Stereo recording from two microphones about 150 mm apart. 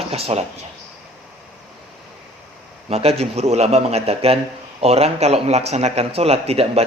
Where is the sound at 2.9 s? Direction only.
40° right (ahead or behind).